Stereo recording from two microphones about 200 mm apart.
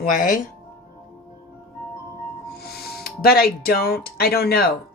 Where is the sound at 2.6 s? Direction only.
50° left (ahead or behind).